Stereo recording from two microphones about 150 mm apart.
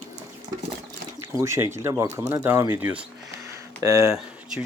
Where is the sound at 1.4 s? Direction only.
15° right (ahead or behind).